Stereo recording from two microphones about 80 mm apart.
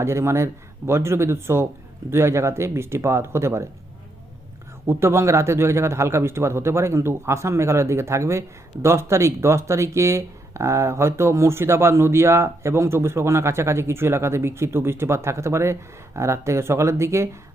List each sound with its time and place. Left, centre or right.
0.0 s a man's voice: right
4.9 s a man's voice: right